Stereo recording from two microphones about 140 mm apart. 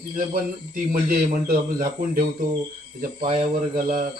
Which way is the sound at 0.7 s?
90° right.